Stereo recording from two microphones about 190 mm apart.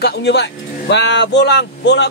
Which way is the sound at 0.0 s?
60° left (ahead or behind).